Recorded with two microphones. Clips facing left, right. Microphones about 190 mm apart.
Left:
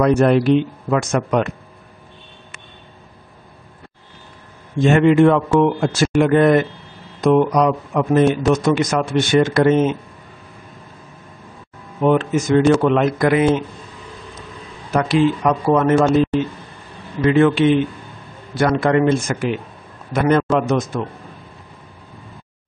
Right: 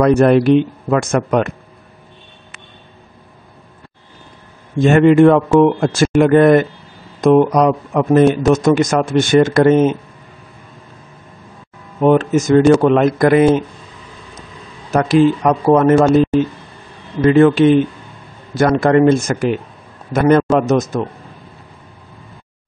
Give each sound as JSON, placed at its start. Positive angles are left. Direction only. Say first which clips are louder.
{"t": 0.0, "sound": "speech", "louder": "right 3 dB", "side_deg": -50}
{"t": 4.8, "sound": "speech", "louder": "right 3 dB", "side_deg": -50}
{"t": 12.0, "sound": "speech", "louder": "right 4 dB", "side_deg": -45}
{"t": 14.9, "sound": "speech", "louder": "right 4 dB", "side_deg": -45}
{"t": 17.2, "sound": "a man's voice", "louder": "right 4 dB", "side_deg": -40}